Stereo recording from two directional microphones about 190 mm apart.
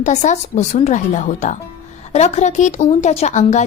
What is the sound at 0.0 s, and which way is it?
A woman's voice, 40° left (ahead or behind).